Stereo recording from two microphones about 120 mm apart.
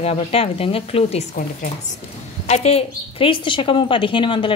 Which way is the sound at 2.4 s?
60° left (ahead or behind).